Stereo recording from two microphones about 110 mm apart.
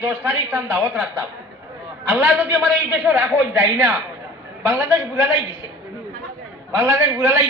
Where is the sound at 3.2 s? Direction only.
25° right (ahead or behind).